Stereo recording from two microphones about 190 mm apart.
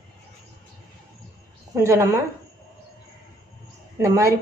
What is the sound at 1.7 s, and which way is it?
Speech, 15° right (ahead or behind).